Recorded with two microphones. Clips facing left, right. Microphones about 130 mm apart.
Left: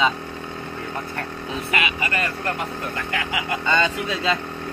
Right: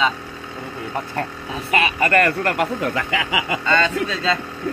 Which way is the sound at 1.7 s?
35° right (ahead or behind).